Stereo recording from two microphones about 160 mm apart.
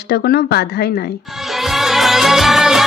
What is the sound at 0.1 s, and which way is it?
Speech, 85° left.